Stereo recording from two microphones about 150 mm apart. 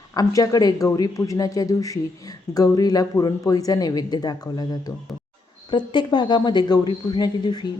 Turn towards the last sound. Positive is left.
turn(degrees=30)  # may be behind; listen again after turning